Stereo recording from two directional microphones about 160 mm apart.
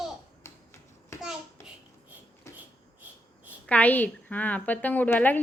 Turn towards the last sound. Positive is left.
turn(degrees=10)  # may be behind; listen again after turning